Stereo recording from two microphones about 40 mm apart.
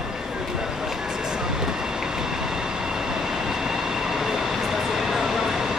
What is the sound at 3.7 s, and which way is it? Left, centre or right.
Vehicle, centre.